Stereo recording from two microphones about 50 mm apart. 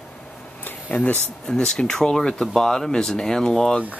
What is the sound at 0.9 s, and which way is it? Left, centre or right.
Speech, left.